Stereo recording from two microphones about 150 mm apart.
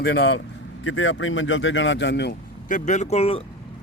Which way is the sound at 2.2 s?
60° left (ahead or behind).